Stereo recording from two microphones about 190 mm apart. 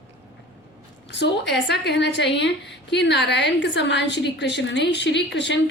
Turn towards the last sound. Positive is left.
turn(degrees=65)  # may be behind; listen again after turning